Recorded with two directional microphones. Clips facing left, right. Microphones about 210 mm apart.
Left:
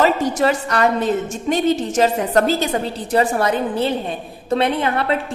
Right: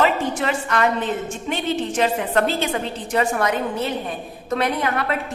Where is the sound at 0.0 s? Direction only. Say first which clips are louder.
Left 4 dB; 40° left (ahead or behind).